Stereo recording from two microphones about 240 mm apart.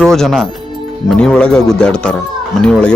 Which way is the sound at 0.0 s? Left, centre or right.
Centre.